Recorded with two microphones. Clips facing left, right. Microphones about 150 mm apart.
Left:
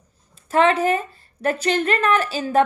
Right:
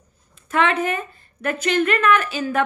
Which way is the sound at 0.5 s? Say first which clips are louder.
Left 3 dB; 35° left (ahead or behind).